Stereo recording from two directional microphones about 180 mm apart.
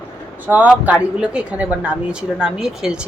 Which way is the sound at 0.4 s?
10° right (ahead or behind).